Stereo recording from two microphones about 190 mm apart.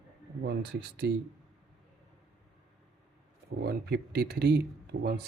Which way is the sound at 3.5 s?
55° right (ahead or behind).